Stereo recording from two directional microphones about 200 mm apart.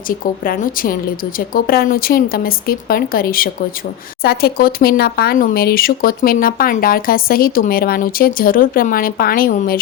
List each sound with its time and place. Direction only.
0.1 s speech: 45° left (ahead or behind)